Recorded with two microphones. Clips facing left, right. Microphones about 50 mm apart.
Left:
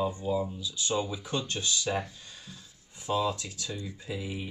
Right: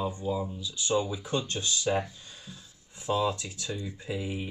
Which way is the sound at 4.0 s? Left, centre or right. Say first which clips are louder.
Right 2 dB; centre.